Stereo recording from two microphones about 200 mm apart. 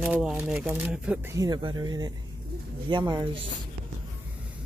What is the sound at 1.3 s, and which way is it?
Speech, 20° right (ahead or behind).